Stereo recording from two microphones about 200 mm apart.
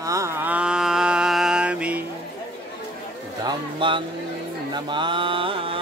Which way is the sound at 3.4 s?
25° right (ahead or behind).